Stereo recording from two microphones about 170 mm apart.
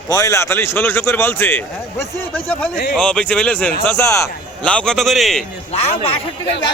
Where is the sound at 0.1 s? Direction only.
20° left (ahead or behind).